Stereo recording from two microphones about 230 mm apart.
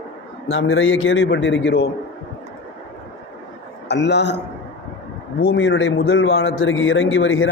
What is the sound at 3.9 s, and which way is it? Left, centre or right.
A man's voice, left.